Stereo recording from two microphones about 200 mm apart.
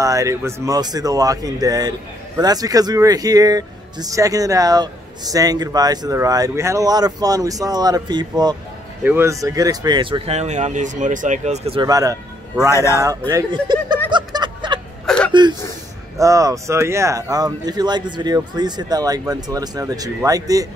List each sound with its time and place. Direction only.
0.0 s speech: 15° right (ahead or behind); by 11.8 s 35° right (ahead or behind)
11.8 s speech: 20° right (ahead or behind)
12.7 s speech: 15° left (ahead or behind)
13.3 s speech: 20° right (ahead or behind)
14.1 s a sound: 20° right (ahead or behind)
15.0 s whimper: 5° left (ahead or behind)
16.2 s speech: 15° right (ahead or behind)